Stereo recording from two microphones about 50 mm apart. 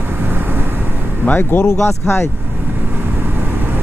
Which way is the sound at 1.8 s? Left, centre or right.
Left.